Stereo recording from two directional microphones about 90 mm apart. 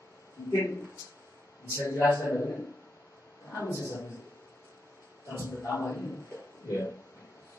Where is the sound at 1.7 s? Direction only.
30° left (ahead or behind).